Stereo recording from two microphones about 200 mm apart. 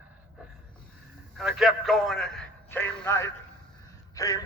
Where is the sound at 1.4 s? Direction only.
Centre (ahead or behind).